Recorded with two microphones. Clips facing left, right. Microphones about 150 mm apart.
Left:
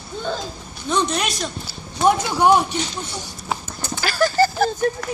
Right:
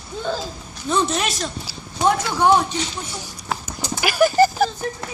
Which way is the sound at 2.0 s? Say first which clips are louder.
Left 1 dB; 15° left (ahead or behind).